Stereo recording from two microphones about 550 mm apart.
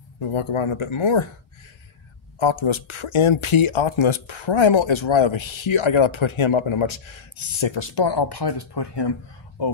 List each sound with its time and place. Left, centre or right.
0.2 s speech: left
2.3 s speech: left